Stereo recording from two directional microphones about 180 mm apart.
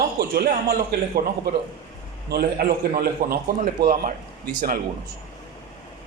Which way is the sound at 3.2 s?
50° right (ahead or behind).